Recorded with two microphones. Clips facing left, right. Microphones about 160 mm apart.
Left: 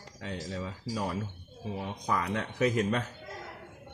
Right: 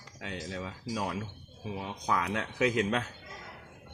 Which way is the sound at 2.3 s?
90° right.